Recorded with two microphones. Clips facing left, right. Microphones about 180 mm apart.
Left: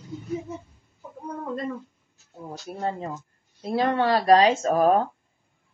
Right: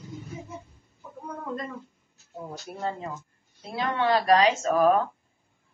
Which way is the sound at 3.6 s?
40° left (ahead or behind).